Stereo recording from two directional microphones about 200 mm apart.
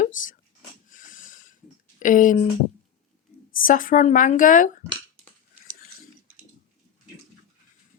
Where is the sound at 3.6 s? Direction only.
40° left (ahead or behind).